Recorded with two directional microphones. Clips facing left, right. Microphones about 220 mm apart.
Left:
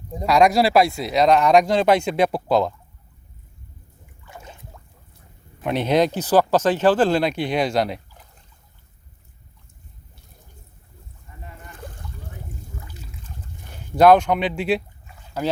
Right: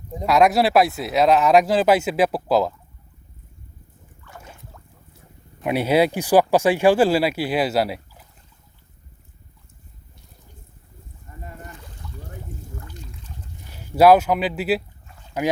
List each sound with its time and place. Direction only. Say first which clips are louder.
0.1 s speech: even; centre (ahead or behind)
4.3 s boat: left 1 dB; 10° left (ahead or behind)
5.6 s speech: right 1 dB; 10° right (ahead or behind)
11.8 s boat: left 7 dB; 50° left (ahead or behind)
12.8 s water: right 2 dB; 5° left (ahead or behind)
13.7 s speech: even; 5° right (ahead or behind)